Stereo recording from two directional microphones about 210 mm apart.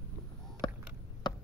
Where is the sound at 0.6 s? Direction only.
20° left (ahead or behind).